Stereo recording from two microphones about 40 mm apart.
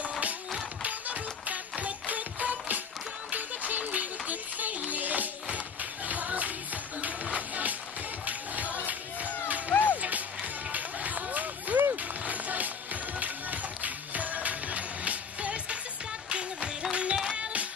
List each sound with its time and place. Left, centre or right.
0.8 s music: right
9.7 s music: left
10.7 s music: right